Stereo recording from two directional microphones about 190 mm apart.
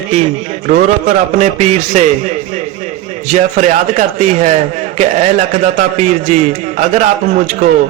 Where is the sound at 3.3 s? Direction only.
35° right (ahead or behind).